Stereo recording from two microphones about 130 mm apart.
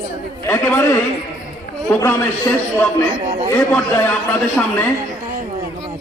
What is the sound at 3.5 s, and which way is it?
Speech, 15° left (ahead or behind).